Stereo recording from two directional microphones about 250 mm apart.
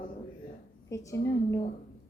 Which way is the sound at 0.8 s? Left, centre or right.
Centre.